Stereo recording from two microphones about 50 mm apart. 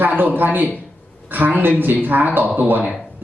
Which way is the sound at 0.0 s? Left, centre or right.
Right.